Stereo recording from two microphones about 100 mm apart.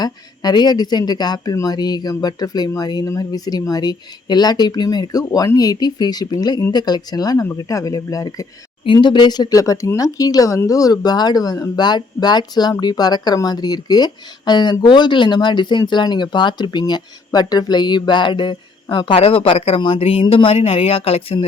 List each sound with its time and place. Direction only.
0.0 s speech: 45° left (ahead or behind)
8.8 s speech: 55° left (ahead or behind); by 19.8 s 85° left
19.8 s speech: 70° left (ahead or behind)